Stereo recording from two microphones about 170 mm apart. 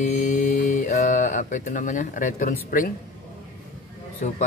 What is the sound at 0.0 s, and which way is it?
Mantra, 50° left (ahead or behind).